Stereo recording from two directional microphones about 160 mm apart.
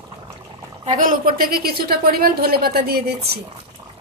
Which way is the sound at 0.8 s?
55° right (ahead or behind).